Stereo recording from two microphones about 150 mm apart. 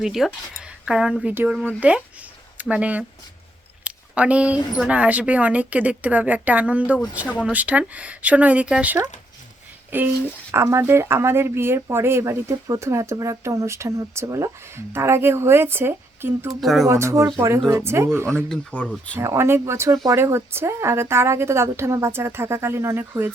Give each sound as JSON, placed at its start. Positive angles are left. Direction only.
{"t": 0.0, "sound": "speech", "side_deg": -5}
{"t": 3.8, "sound": "a sound", "side_deg": -10}
{"t": 4.9, "sound": "speech", "side_deg": -10}
{"t": 16.5, "sound": "speech", "side_deg": 0}
{"t": 16.8, "sound": "speech", "side_deg": -20}
{"t": 18.4, "sound": "speech", "side_deg": 5}
{"t": 19.1, "sound": "speech", "side_deg": -15}